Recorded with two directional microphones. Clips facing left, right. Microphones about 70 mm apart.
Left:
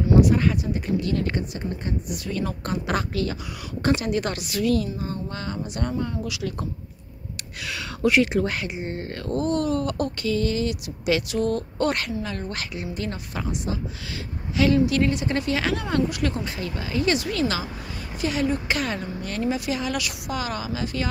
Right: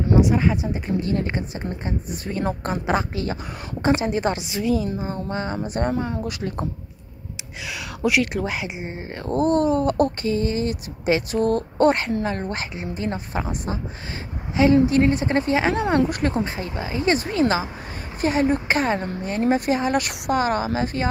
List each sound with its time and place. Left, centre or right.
0.2 s speech: centre; by 6.6 s right
7.3 s speech: centre
8.2 s speech: centre
8.5 s speech: centre
9.2 s speech: right
14.9 s speech: right
15.7 s speech: right
19.4 s speech: right